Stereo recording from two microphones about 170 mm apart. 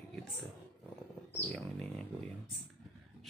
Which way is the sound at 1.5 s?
5° left (ahead or behind).